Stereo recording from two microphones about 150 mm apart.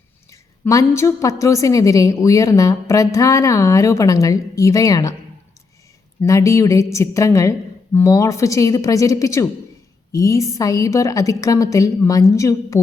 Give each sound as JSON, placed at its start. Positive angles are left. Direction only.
{"t": 0.3, "sound": "a woman's voice", "side_deg": 20}
{"t": 6.2, "sound": "a woman's voice", "side_deg": 20}